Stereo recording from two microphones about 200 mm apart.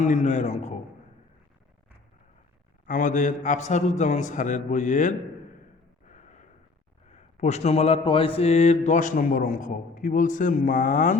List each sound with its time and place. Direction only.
0.0 s speech: 35° left (ahead or behind)
2.8 s speech: 40° left (ahead or behind)
6.1 s snort: 40° left (ahead or behind)
7.1 s speech: 35° left (ahead or behind)